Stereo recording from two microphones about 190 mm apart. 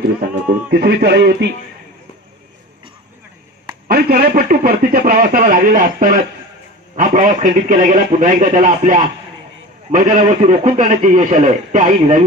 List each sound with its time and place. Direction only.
0.2 s speech: 55° right (ahead or behind)
3.8 s a man's voice: 50° right (ahead or behind)
10.1 s speech: 30° right (ahead or behind)